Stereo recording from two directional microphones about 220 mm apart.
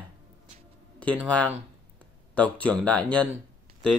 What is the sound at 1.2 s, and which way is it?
Speech, 5° left (ahead or behind).